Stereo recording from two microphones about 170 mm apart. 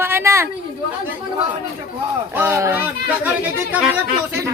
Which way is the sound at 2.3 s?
15° right (ahead or behind).